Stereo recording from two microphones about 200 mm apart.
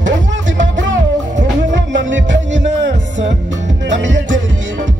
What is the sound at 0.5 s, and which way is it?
Music, 65° right (ahead or behind).